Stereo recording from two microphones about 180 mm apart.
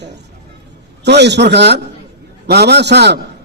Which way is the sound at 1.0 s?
70° right (ahead or behind).